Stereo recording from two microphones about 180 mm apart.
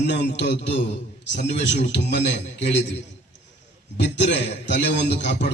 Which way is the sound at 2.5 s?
70° left (ahead or behind).